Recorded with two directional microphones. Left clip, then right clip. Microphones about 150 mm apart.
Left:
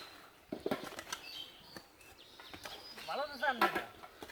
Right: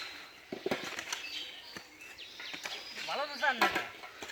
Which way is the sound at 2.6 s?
10° right (ahead or behind).